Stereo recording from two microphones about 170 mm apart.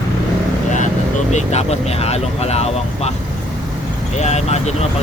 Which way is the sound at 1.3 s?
40° left (ahead or behind).